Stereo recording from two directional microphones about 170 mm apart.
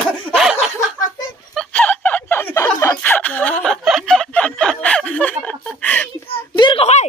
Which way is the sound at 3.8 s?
Centre (ahead or behind).